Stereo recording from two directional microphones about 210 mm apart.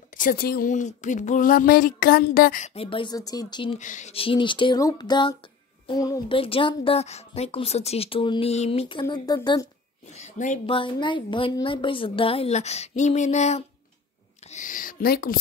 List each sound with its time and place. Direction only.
0.1 s speech: 40° left (ahead or behind); by 3.8 s 25° left (ahead or behind)
3.8 s speech: 35° left (ahead or behind); by 9.7 s 20° left (ahead or behind)
10.1 s a sound: 35° left (ahead or behind)
10.7 s speech: 25° left (ahead or behind); by 15.3 s 45° left (ahead or behind)